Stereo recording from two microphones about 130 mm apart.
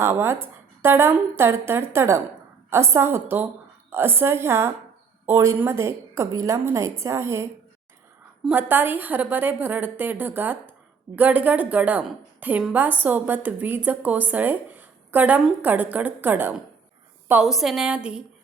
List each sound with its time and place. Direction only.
0.0 s a woman's voice: 20° right (ahead or behind)
8.4 s a woman's voice: 15° right (ahead or behind)
17.4 s a woman's voice: centre (ahead or behind)